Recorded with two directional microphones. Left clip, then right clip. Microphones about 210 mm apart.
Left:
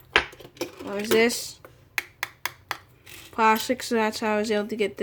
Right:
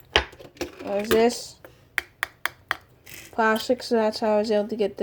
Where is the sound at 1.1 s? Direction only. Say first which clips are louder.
Even; 15° left (ahead or behind).